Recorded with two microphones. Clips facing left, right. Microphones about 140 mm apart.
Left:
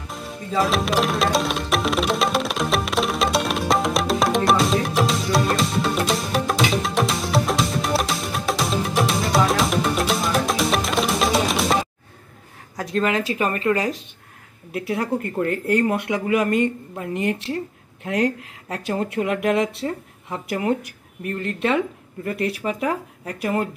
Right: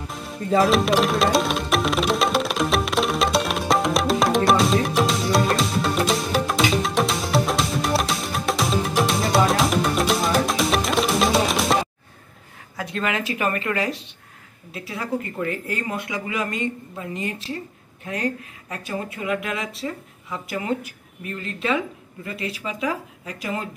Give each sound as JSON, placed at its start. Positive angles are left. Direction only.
{"t": 0.1, "sound": "music", "side_deg": 0}
{"t": 12.7, "sound": "speech", "side_deg": 40}
{"t": 14.7, "sound": "speech", "side_deg": 60}
{"t": 18.0, "sound": "speech", "side_deg": 80}
{"t": 19.8, "sound": "speech", "side_deg": 45}
{"t": 20.4, "sound": "speech", "side_deg": 60}